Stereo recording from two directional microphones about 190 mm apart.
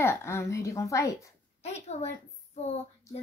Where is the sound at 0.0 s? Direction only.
15° left (ahead or behind).